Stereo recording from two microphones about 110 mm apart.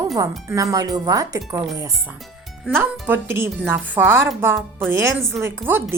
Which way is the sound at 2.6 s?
20° right (ahead or behind).